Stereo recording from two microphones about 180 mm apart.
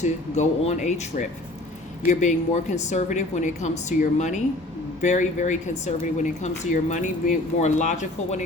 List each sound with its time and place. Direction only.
0.0 s speech: 40° left (ahead or behind)